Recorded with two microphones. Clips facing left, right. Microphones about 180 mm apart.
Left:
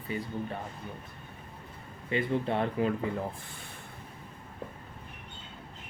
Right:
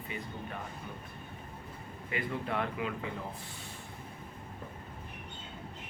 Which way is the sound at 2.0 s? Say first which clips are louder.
Left 6 dB; 30° left (ahead or behind).